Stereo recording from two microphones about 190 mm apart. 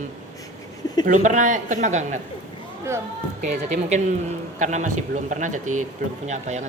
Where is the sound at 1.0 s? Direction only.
40° right (ahead or behind).